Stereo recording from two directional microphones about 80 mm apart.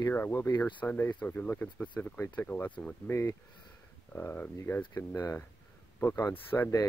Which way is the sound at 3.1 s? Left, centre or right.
Left.